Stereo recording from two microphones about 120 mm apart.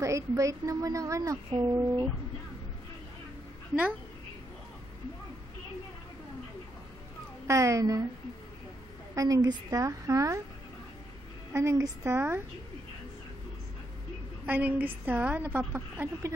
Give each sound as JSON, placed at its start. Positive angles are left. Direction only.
{"t": 0.0, "sound": "a woman's voice", "side_deg": -25}
{"t": 7.4, "sound": "a woman's voice", "side_deg": -25}
{"t": 9.1, "sound": "a woman's voice", "side_deg": -30}
{"t": 11.5, "sound": "a woman's voice", "side_deg": -25}
{"t": 14.4, "sound": "a woman's voice", "side_deg": -10}